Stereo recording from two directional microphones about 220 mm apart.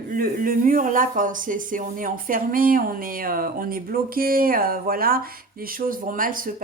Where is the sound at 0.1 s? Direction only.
40° right (ahead or behind).